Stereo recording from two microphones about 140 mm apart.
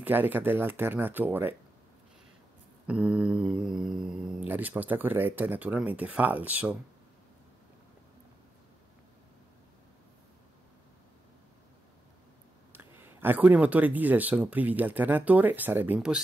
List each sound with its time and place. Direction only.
0.0 s speech: 15° right (ahead or behind)
2.9 s speech: 5° right (ahead or behind)
12.7 s speech: 15° right (ahead or behind)